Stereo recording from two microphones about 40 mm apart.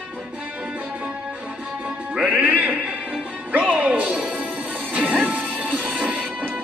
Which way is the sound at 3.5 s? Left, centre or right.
Right.